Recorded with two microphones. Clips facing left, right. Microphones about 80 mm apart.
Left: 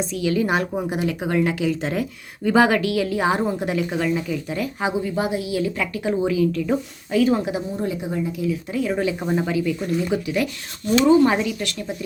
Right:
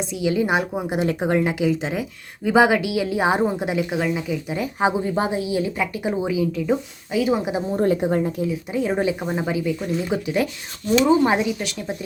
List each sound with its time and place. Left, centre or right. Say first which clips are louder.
0.2 s a woman's voice: right 1 dB; centre
0.9 s speech: right 2 dB; right
1.8 s a woman's voice: left 2 dB; centre
4.6 s speech: right 4 dB; right; by 7.4 s centre
7.8 s a woman's voice: right 6 dB; right
8.4 s speech: even; right
9.2 s speech: left 1 dB; centre